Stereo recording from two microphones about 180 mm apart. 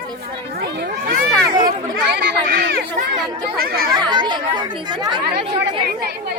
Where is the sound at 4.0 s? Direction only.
25° right (ahead or behind).